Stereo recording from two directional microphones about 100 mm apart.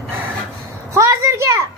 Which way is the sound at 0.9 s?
30° right (ahead or behind).